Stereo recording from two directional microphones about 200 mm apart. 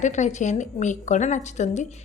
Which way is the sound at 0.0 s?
35° left (ahead or behind).